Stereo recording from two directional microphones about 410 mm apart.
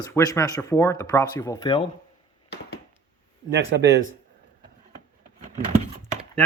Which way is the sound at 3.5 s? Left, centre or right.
Right.